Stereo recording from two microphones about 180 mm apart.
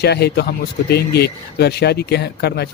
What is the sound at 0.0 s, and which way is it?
A man's voice, 65° left (ahead or behind).